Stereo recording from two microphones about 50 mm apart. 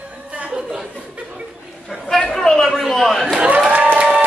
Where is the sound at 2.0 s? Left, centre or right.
Centre.